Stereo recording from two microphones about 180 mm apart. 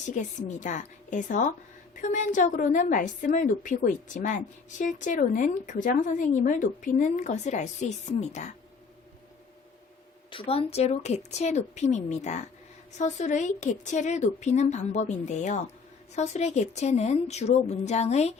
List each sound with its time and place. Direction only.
0.1 s a woman's voice: 45° left (ahead or behind)
10.2 s a woman's voice: 30° left (ahead or behind)